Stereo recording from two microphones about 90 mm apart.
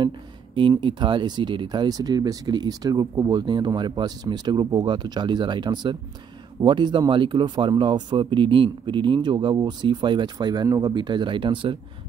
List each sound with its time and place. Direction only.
0.6 s speech: 65° right (ahead or behind)